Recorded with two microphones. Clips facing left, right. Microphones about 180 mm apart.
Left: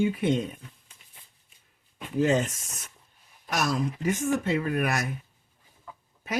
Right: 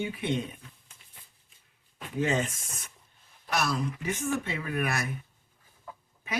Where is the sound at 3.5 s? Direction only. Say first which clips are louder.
Left 2 dB; 45° left (ahead or behind).